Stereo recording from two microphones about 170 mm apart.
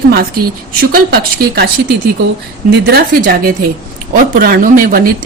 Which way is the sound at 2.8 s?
65° right (ahead or behind).